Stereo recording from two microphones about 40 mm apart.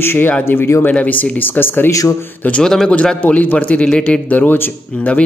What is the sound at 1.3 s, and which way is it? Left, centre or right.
Speech, left.